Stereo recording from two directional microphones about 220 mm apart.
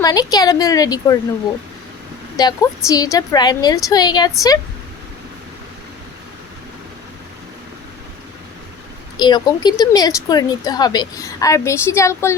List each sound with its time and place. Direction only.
0.0 s speech: 15° left (ahead or behind)
2.3 s speech: 15° left (ahead or behind)
9.1 s speech: 20° left (ahead or behind)